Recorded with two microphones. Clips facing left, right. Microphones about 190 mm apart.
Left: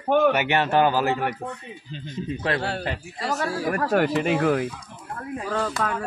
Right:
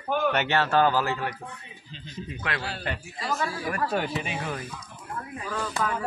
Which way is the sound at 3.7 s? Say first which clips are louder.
Left 5 dB; 50° left (ahead or behind).